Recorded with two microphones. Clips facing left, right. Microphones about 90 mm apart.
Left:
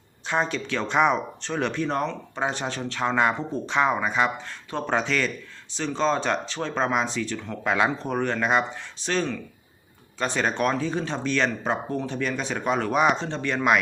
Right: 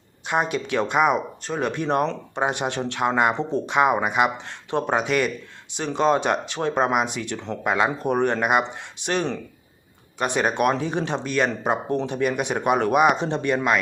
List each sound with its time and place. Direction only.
0.3 s speech: 10° right (ahead or behind)
1.8 s speech: 20° right (ahead or behind)
7.6 s speech: 10° right (ahead or behind)